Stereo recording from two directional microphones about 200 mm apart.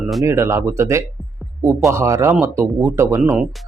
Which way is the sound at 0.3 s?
15° right (ahead or behind).